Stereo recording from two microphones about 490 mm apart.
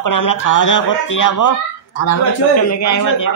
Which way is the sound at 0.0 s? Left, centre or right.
Left.